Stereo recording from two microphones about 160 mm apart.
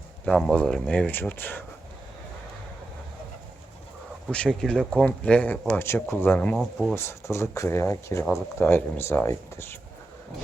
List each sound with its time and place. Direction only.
0.3 s speech: 5° left (ahead or behind)
4.3 s speech: 5° left (ahead or behind)
6.9 s speech: 15° left (ahead or behind)